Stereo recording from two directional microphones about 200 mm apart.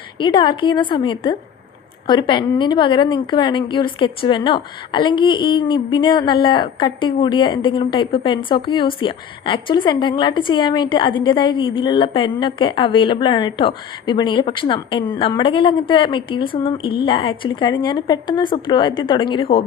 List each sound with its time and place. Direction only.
0.2 s a woman's voice: 25° left (ahead or behind)